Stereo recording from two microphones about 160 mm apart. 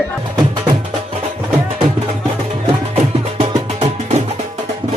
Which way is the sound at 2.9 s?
40° right (ahead or behind).